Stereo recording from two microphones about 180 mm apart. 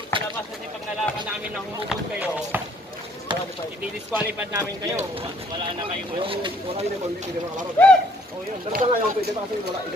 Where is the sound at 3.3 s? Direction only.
25° right (ahead or behind).